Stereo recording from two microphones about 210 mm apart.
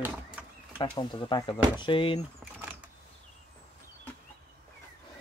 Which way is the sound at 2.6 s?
10° right (ahead or behind).